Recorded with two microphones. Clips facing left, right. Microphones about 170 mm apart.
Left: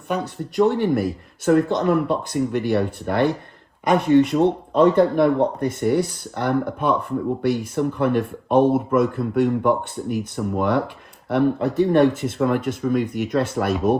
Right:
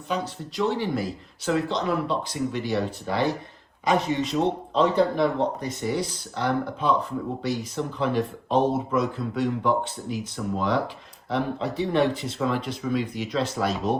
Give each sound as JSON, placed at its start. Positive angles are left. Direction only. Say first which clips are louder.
{"t": 0.1, "sound": "speech", "louder": "left 4 dB", "side_deg": 55}